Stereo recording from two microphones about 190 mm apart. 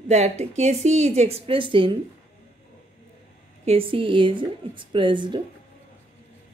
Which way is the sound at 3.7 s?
30° right (ahead or behind).